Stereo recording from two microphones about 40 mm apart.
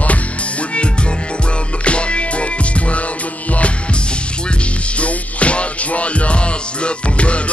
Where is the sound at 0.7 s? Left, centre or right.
Left.